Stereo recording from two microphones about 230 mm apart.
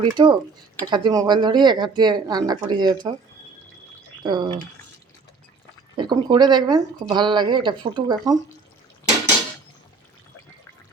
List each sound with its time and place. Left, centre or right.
0.0 s speech: centre
4.2 s speech: centre
6.0 s speech: centre